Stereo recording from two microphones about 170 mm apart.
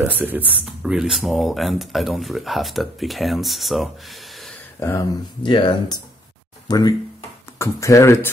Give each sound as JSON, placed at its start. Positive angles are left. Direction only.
{"t": 0.0, "sound": "speech", "side_deg": -10}
{"t": 4.7, "sound": "speech", "side_deg": 15}
{"t": 5.4, "sound": "speech", "side_deg": 30}